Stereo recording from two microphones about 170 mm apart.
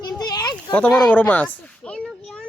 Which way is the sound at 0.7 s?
10° left (ahead or behind).